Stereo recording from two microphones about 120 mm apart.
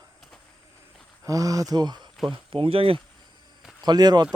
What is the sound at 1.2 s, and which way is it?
Speech, 30° right (ahead or behind).